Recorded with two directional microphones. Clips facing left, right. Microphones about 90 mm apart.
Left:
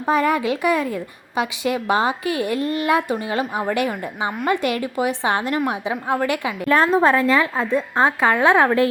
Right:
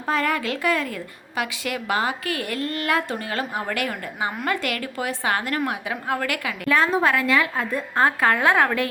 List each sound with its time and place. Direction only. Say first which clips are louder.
0.0 s a woman's voice: left 5 dB; 20° left (ahead or behind)
6.7 s a woman's voice: left 4 dB; 40° left (ahead or behind)